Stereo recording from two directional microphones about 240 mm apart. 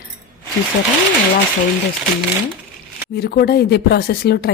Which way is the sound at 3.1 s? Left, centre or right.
Left.